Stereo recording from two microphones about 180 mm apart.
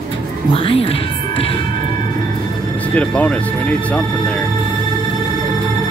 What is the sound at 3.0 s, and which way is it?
Speech, 5° left (ahead or behind).